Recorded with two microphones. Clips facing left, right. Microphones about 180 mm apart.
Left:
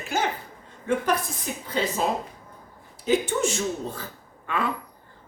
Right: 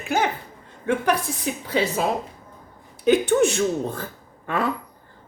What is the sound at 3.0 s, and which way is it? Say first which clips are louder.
Speech: right 6 dB; 65° right (ahead or behind).